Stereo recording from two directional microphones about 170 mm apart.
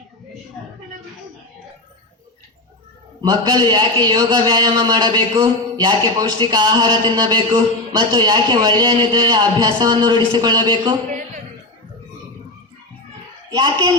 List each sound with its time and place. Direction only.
3.2 s a man's voice: 25° right (ahead or behind)
13.5 s a man's voice: 25° right (ahead or behind)